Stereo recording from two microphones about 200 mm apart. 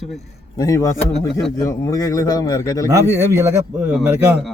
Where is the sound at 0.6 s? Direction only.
15° left (ahead or behind).